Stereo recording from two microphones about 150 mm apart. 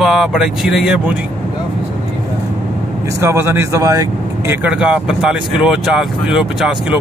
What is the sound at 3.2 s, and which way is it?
Speech, 15° right (ahead or behind).